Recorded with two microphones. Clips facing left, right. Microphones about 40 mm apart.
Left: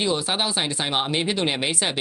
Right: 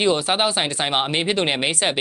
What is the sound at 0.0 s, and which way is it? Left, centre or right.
Speech, right.